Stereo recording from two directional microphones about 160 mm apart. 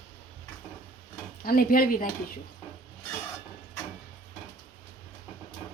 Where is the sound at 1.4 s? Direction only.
65° left (ahead or behind).